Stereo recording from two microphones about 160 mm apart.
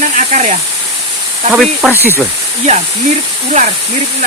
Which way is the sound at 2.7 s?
45° right (ahead or behind).